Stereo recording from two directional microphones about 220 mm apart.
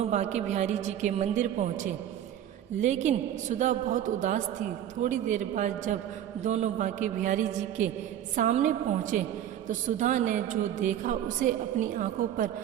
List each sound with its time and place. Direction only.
0.0 s a woman's voice: 30° right (ahead or behind)